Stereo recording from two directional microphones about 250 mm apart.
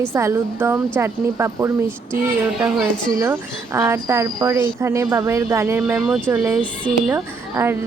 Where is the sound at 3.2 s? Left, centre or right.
Centre.